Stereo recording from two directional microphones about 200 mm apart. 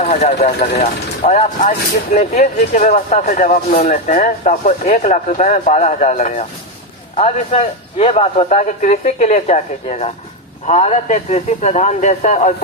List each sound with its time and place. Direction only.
0.0 s speech: 35° left (ahead or behind)